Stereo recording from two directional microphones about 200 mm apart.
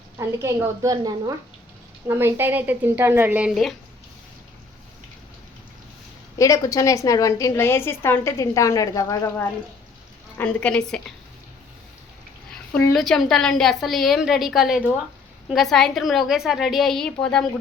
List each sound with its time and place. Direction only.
0.2 s a woman's voice: 15° right (ahead or behind)
6.4 s a woman's voice: 15° left (ahead or behind)
10.3 s a woman's voice: 5° left (ahead or behind)
12.7 s a woman's voice: 5° left (ahead or behind)